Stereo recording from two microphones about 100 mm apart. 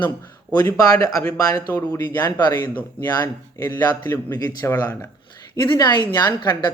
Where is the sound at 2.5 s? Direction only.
20° left (ahead or behind).